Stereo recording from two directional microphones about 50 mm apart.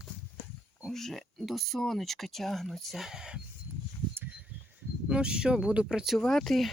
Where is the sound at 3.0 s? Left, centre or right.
Centre.